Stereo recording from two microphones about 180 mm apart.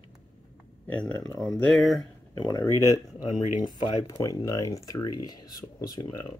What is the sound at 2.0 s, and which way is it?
Speech, 20° left (ahead or behind).